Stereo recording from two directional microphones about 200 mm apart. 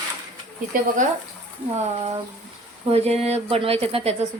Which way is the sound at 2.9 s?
30° right (ahead or behind).